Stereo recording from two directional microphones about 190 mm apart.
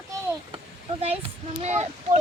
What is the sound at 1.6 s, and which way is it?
Speech, 35° right (ahead or behind).